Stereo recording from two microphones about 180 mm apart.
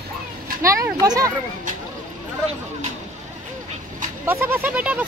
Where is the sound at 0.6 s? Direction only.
15° right (ahead or behind).